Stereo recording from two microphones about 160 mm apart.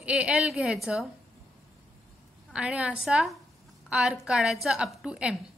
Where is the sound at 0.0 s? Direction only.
5° right (ahead or behind).